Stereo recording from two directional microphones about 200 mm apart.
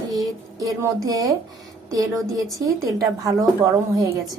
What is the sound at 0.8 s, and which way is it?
Speech, 15° right (ahead or behind).